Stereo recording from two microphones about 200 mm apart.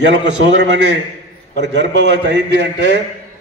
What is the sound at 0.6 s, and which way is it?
A man's voice, 60° right (ahead or behind).